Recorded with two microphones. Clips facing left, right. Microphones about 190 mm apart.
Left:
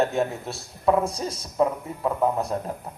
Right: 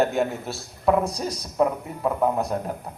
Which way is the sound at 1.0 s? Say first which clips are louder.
Right 1 dB; 30° left (ahead or behind).